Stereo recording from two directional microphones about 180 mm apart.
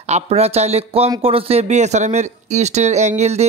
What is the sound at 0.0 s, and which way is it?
Speech, 35° right (ahead or behind).